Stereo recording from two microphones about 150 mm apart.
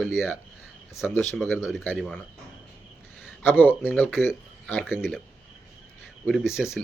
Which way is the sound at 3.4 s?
15° left (ahead or behind).